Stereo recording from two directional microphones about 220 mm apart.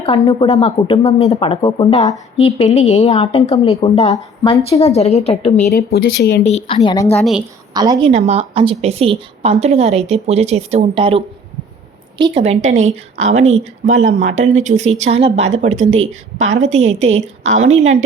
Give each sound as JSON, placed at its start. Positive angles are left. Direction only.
{"t": 0.0, "sound": "speech", "side_deg": 25}
{"t": 5.7, "sound": "speech", "side_deg": 45}
{"t": 6.4, "sound": "speech", "side_deg": 30}
{"t": 7.7, "sound": "a woman's voice", "side_deg": -20}
{"t": 8.1, "sound": "a woman's voice", "side_deg": -30}